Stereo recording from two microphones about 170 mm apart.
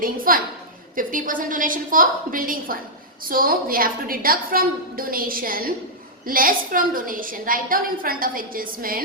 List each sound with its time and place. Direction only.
0.0 s a woman's voice: 55° right (ahead or behind)